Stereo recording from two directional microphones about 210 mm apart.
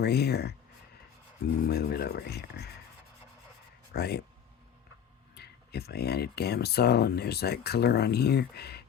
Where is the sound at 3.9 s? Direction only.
50° left (ahead or behind).